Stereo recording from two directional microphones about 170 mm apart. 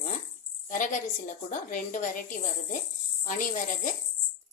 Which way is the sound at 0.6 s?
50° left (ahead or behind).